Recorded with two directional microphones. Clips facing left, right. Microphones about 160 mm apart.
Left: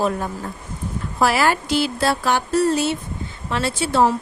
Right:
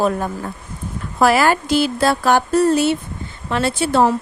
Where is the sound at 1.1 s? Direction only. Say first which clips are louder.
Right 4 dB; 50° right (ahead or behind).